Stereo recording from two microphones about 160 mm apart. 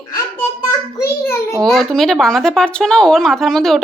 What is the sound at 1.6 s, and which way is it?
Speech, centre (ahead or behind).